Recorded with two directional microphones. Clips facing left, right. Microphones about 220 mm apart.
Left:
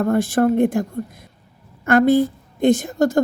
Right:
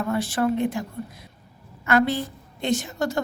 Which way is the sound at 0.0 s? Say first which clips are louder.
Left 7 dB; 50° left (ahead or behind).